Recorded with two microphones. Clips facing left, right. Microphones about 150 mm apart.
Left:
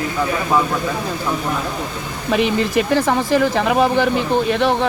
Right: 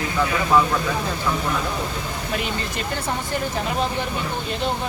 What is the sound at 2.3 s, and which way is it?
Speech, 90° left.